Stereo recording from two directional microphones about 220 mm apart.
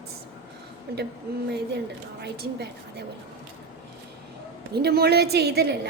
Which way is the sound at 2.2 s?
50° right (ahead or behind).